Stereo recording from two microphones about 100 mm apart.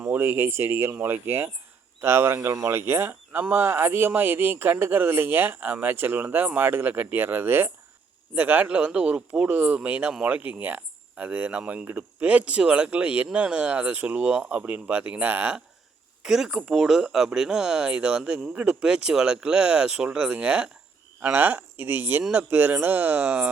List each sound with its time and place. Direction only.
0.0 s speech: 25° right (ahead or behind)
16.2 s speech: 5° right (ahead or behind)